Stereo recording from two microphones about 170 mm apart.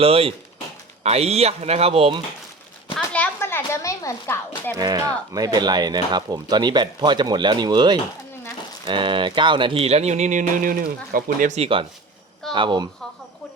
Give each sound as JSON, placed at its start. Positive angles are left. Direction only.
{"t": 0.0, "sound": "speech", "side_deg": -35}
{"t": 3.1, "sound": "a sound", "side_deg": 10}
{"t": 4.7, "sound": "speech", "side_deg": -20}